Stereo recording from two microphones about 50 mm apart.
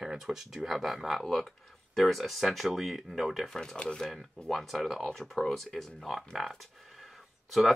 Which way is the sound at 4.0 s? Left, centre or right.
Centre.